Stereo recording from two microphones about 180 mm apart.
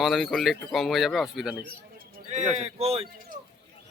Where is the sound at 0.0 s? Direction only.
Centre (ahead or behind).